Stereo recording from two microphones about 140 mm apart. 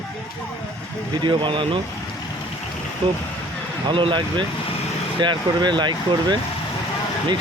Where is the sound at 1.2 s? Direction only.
35° right (ahead or behind).